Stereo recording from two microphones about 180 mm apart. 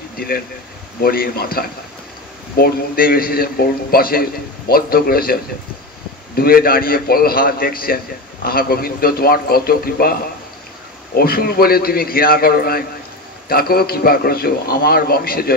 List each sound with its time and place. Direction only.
1.0 s a man's voice: 55° left (ahead or behind)
11.1 s a man's voice: 55° left (ahead or behind)